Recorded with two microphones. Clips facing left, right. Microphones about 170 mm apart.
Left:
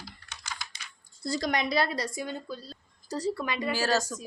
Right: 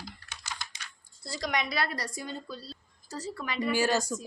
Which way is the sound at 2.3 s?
45° left (ahead or behind).